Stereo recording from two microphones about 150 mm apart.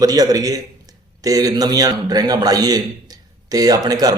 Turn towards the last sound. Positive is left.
turn(degrees=-25)  # may be behind; listen again after turning